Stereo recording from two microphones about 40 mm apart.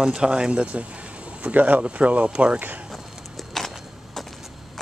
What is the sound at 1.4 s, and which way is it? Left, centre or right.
Speech, right.